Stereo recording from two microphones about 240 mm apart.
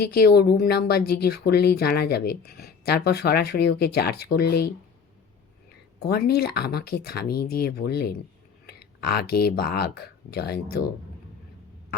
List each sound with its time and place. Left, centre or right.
0.0 s speech: left
6.0 s speech: left